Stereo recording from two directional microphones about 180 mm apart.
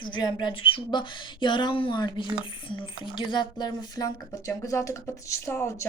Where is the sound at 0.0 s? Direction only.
25° left (ahead or behind).